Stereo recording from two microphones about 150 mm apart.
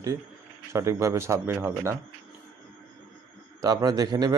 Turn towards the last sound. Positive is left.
turn(degrees=-25)  # may be behind; listen again after turning